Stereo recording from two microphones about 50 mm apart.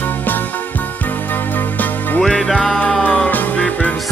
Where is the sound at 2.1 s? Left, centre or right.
Centre.